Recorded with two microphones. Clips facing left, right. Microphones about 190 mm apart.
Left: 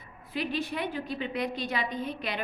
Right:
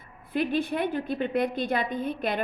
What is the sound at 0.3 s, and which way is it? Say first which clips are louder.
A woman's voice: right 5 dB; 55° right (ahead or behind).